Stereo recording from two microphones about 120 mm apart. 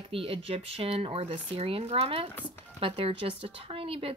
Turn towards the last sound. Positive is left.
turn(degrees=-50)  # may be behind; listen again after turning